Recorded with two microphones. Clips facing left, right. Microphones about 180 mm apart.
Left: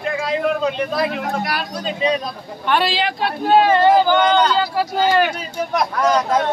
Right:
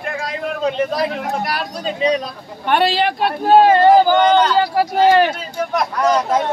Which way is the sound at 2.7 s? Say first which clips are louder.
Right 3 dB; 50° right (ahead or behind).